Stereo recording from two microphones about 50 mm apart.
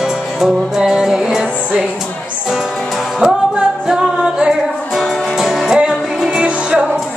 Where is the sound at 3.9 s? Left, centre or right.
Centre.